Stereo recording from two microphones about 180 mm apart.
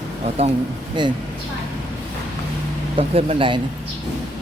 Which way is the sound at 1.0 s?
25° right (ahead or behind).